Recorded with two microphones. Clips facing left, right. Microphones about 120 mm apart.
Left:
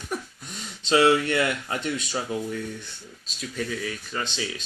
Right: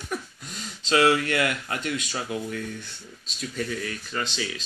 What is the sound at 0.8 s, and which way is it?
Speech, 25° left (ahead or behind).